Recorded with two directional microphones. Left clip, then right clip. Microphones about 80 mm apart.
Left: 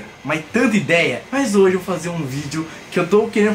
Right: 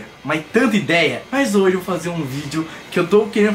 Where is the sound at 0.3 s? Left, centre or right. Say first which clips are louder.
Right 1 dB; centre.